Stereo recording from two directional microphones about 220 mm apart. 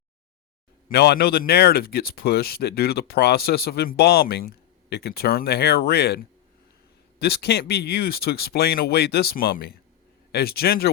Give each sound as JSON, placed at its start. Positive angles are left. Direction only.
{"t": 0.9, "sound": "speech", "side_deg": 45}